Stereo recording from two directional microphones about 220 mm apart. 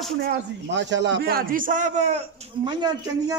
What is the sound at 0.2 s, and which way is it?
A man's voice, 50° right (ahead or behind).